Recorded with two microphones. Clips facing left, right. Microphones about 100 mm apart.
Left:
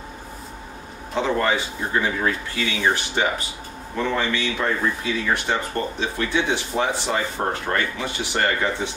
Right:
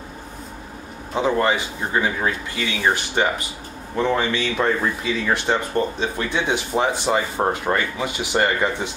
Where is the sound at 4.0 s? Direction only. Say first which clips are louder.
Right 3 dB; 15° right (ahead or behind).